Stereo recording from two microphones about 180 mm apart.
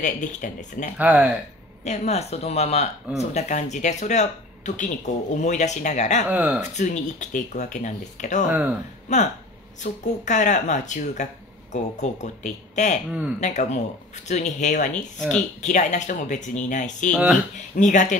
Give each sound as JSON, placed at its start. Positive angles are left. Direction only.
{"t": 0.0, "sound": "speech", "side_deg": 45}
{"t": 0.9, "sound": "speech", "side_deg": -10}
{"t": 1.9, "sound": "speech", "side_deg": 40}
{"t": 6.3, "sound": "speech", "side_deg": -5}
{"t": 6.7, "sound": "speech", "side_deg": 40}
{"t": 8.5, "sound": "speech", "side_deg": -5}
{"t": 9.1, "sound": "speech", "side_deg": 40}
{"t": 17.1, "sound": "speech", "side_deg": 0}
{"t": 17.7, "sound": "speech", "side_deg": 45}